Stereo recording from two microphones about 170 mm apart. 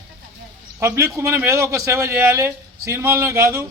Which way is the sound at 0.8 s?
15° right (ahead or behind).